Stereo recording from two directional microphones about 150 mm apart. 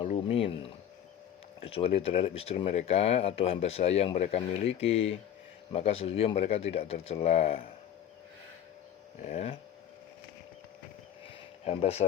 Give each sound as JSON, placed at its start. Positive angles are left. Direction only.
{"t": 0.3, "sound": "speech", "side_deg": 40}
{"t": 9.2, "sound": "speech", "side_deg": 45}
{"t": 11.6, "sound": "speech", "side_deg": 45}